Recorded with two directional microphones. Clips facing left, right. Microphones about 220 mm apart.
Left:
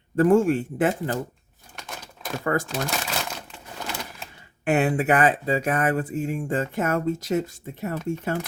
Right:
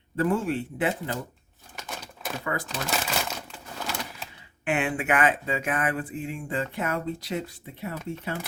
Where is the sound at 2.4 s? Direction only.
45° left (ahead or behind).